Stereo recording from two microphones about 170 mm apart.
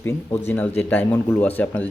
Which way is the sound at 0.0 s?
10° left (ahead or behind).